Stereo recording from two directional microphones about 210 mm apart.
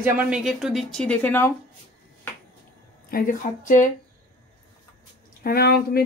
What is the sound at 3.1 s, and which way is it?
Speech, 45° left (ahead or behind).